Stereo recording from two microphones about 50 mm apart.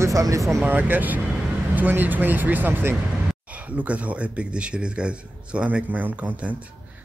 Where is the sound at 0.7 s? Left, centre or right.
Right.